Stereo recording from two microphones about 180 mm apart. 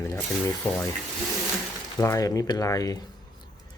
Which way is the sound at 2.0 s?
20° left (ahead or behind).